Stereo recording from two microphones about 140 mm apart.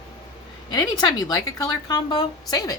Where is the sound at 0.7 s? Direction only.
30° left (ahead or behind).